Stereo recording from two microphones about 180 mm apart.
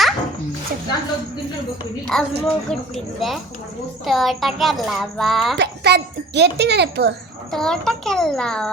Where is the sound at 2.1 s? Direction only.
5° left (ahead or behind).